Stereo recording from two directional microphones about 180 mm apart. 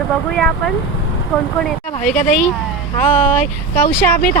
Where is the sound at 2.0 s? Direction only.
45° left (ahead or behind).